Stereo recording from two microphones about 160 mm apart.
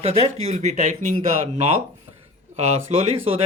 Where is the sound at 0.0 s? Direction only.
40° right (ahead or behind).